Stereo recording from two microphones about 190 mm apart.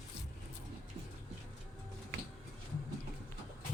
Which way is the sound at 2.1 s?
60° right (ahead or behind).